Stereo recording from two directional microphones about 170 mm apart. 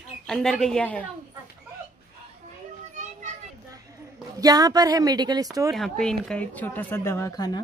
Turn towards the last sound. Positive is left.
turn(degrees=15)  # may be behind; listen again after turning